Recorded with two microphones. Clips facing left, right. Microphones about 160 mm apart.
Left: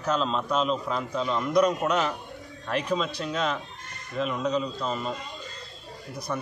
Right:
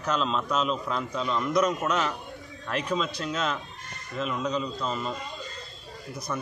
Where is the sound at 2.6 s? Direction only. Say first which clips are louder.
Left 1 dB; 5° left (ahead or behind).